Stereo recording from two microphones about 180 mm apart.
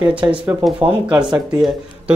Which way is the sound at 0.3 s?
10° right (ahead or behind).